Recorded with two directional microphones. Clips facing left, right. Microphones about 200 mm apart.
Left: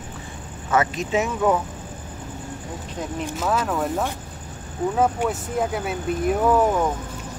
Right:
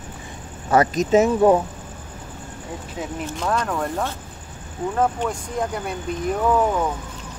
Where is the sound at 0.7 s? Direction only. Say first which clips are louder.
Right 5 dB; 40° right (ahead or behind).